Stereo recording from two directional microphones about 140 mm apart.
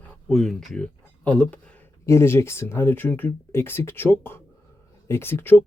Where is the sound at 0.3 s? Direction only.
Centre (ahead or behind).